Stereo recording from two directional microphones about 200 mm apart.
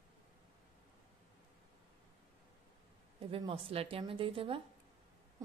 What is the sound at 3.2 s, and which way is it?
Speech, 25° right (ahead or behind).